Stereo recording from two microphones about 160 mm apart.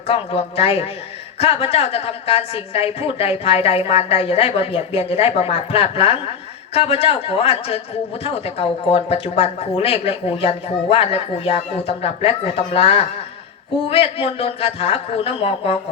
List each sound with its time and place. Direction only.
0.1 s speech: 35° left (ahead or behind)